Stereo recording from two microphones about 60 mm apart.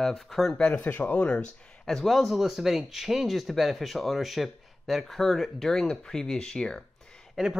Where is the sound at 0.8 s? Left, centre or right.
Left.